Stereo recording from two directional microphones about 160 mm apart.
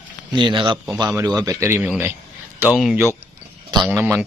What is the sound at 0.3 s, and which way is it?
Speech, 30° right (ahead or behind).